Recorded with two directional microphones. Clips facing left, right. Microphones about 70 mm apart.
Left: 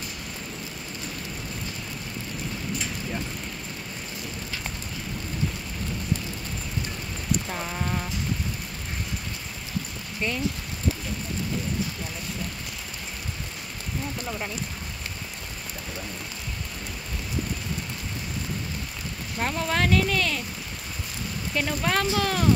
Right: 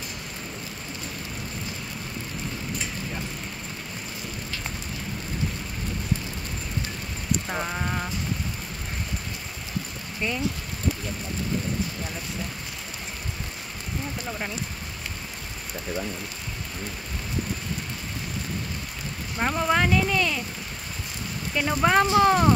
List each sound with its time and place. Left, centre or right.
7.4 s a sound: right
10.2 s speech: centre
19.3 s speech: right
21.6 s speech: right